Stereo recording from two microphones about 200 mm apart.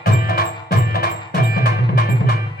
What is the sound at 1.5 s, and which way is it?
Music, 50° left (ahead or behind).